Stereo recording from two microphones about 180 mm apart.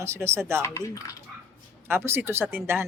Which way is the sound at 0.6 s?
15° left (ahead or behind).